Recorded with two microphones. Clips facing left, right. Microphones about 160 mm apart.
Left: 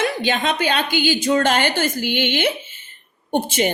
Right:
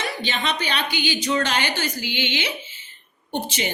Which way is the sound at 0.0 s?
50° left (ahead or behind).